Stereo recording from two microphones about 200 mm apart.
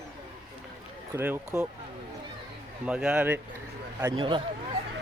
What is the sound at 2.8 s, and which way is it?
A man's voice, 5° right (ahead or behind).